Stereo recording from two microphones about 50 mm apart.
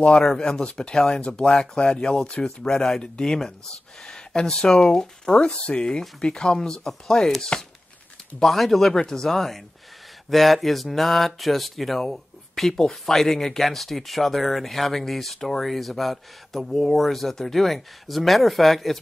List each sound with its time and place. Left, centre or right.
0.0 s speech: centre